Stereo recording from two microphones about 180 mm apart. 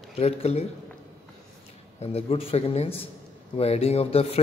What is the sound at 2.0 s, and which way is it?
Speech, 35° left (ahead or behind).